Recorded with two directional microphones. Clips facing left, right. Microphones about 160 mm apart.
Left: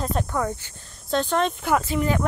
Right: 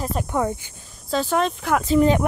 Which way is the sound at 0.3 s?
15° right (ahead or behind).